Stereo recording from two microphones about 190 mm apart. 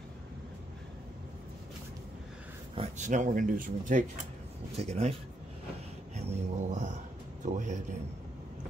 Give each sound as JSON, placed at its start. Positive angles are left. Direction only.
{"t": 2.7, "sound": "speech", "side_deg": -35}
{"t": 4.7, "sound": "speech", "side_deg": -35}
{"t": 6.1, "sound": "a sound", "side_deg": -35}
{"t": 7.4, "sound": "music", "side_deg": -40}